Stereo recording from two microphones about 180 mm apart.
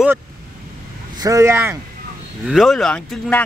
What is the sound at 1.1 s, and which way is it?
Speech, 20° right (ahead or behind).